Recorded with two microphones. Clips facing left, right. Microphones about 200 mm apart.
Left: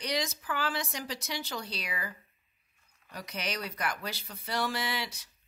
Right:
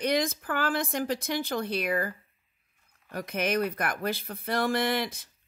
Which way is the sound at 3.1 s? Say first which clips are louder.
Right 9 dB; 55° right (ahead or behind).